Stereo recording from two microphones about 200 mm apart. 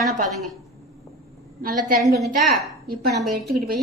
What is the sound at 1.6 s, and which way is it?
Speech, 45° right (ahead or behind).